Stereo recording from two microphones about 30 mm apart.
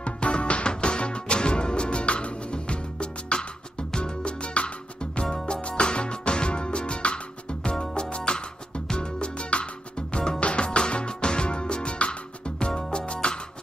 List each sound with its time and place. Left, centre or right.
0.0 s music: left
5.2 s music: left